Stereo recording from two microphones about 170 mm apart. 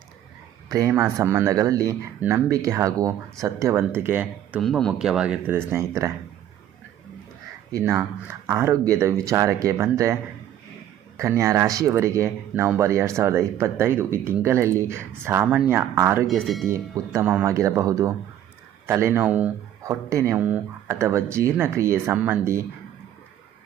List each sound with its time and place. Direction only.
0.7 s speech: 20° right (ahead or behind)
4.6 s speech: centre (ahead or behind); by 6.1 s 15° right (ahead or behind)
7.7 s speech: 15° right (ahead or behind)
11.2 s speech: 20° right (ahead or behind)
16.2 s speech: centre (ahead or behind)
17.1 s speech: 15° right (ahead or behind)